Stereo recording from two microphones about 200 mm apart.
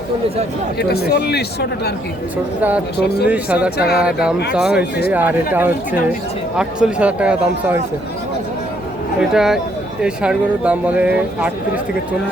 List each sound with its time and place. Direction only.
0.8 s speech: 50° left (ahead or behind)
2.6 s speech: 10° right (ahead or behind)
4.8 s speech: 50° left (ahead or behind)
5.1 s speech: 10° right (ahead or behind)
9.3 s speech: centre (ahead or behind)